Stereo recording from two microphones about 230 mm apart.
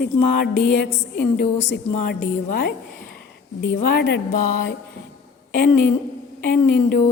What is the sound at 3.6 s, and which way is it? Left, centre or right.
A woman's voice, left.